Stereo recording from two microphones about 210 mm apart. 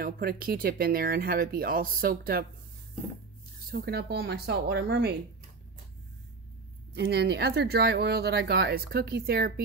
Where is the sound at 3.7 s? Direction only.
45° right (ahead or behind).